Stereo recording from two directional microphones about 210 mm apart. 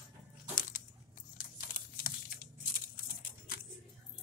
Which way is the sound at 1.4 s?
45° left (ahead or behind).